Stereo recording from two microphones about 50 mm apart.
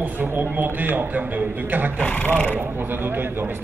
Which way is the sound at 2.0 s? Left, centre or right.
Left.